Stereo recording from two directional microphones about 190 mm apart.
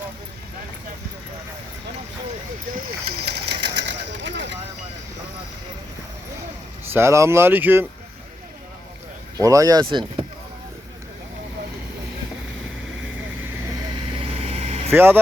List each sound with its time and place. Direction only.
2.7 s speech: 60° right (ahead or behind)
3.8 s a sound: 70° right (ahead or behind)
6.9 s speech: 15° right (ahead or behind)
9.4 s speech: 15° right (ahead or behind)
14.2 s vehicle: 30° right (ahead or behind)
14.9 s speech: 10° right (ahead or behind)